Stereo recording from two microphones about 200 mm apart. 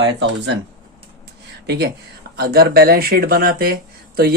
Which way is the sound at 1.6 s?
55° right (ahead or behind).